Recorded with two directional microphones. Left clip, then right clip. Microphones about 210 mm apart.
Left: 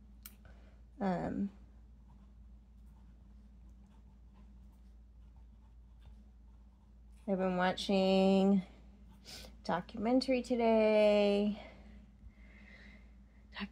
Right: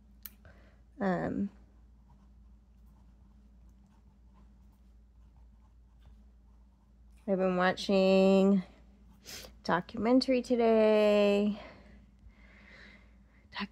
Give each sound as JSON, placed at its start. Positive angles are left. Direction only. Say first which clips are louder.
{"t": 0.9, "sound": "speech", "louder": "right 4 dB", "side_deg": -30}
{"t": 7.2, "sound": "speech", "louder": "right 5 dB", "side_deg": -30}
{"t": 12.4, "sound": "gasp", "louder": "right 4 dB", "side_deg": -30}
{"t": 13.5, "sound": "a sound", "louder": "right 6 dB", "side_deg": -25}